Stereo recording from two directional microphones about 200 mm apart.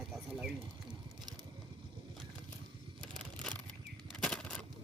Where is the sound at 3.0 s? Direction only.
5° left (ahead or behind).